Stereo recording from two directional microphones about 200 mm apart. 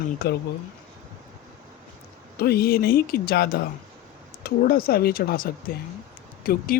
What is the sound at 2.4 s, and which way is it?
Speech, 50° left (ahead or behind).